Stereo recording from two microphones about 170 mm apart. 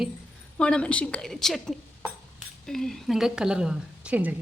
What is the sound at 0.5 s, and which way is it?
A woman's voice, 5° left (ahead or behind).